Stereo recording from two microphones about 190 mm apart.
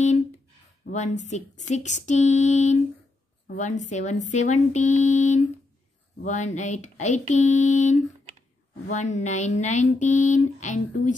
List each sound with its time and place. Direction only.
0.8 s speech: 40° left (ahead or behind)